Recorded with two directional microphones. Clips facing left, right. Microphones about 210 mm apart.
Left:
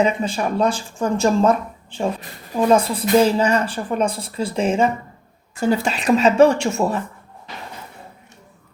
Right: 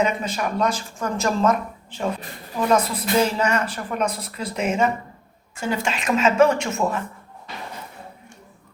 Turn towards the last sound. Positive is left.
turn(degrees=30)  # may be behind; listen again after turning